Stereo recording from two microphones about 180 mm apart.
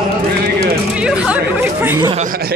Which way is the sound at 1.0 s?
10° right (ahead or behind).